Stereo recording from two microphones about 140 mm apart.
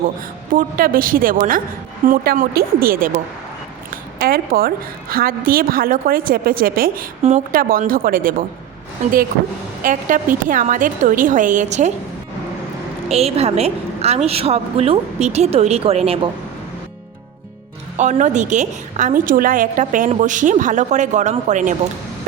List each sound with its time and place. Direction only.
0.5 s a woman's voice: 90° right
4.2 s a woman's voice: 90° right
7.2 s speech: 55° right (ahead or behind)
7.5 s a woman's voice: 90° right
9.8 s a woman's voice: 70° right (ahead or behind)
13.1 s a woman's voice: 50° right (ahead or behind)
17.9 s a woman's voice: 55° right (ahead or behind)